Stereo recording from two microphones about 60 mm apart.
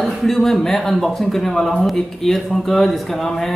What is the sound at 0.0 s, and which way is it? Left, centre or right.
A man's voice, centre.